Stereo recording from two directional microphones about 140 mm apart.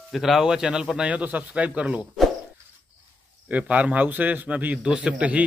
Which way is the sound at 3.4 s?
10° right (ahead or behind).